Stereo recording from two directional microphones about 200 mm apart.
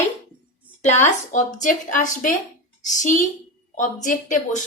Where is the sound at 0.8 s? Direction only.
35° left (ahead or behind).